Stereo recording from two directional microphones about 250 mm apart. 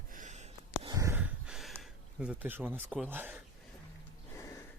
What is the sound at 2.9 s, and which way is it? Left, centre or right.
Speech, centre.